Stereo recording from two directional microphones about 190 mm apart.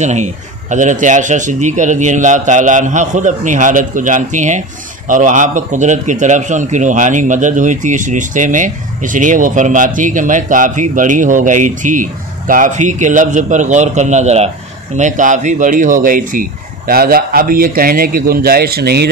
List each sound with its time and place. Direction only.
0.0 s speech: 40° right (ahead or behind); by 19.0 s 55° right (ahead or behind)